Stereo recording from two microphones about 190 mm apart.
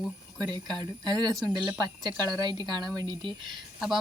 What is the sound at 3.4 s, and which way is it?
Speech, centre (ahead or behind).